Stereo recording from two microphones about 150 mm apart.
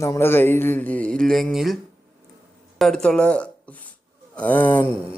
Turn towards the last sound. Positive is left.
turn(degrees=10)  # may be behind; listen again after turning